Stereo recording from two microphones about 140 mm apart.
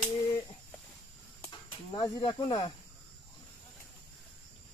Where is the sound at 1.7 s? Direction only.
30° left (ahead or behind).